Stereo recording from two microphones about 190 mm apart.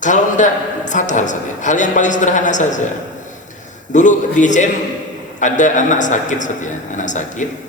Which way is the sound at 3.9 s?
40° left (ahead or behind).